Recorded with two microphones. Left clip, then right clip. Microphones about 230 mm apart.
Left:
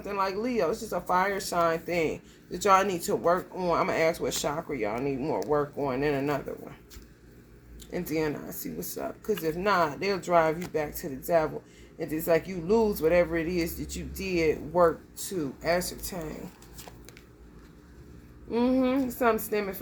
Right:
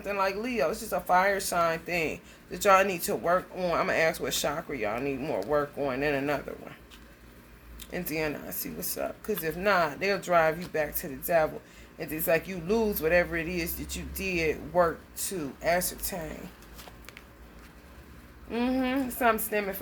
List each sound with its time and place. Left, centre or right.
0.0 s speech: centre
7.9 s speech: centre
18.5 s speech: centre